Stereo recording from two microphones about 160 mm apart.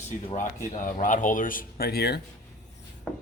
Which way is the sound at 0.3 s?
50° left (ahead or behind).